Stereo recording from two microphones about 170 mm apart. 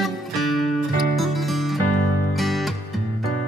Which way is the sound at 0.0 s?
Centre (ahead or behind).